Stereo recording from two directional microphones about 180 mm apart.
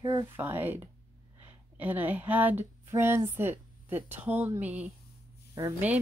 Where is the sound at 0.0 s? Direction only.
20° right (ahead or behind).